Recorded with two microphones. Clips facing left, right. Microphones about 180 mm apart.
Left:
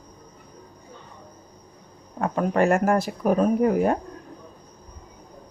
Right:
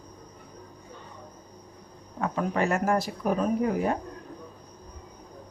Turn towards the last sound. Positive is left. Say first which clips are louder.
# left 6 dB
turn(degrees=55)  # may be behind; listen again after turning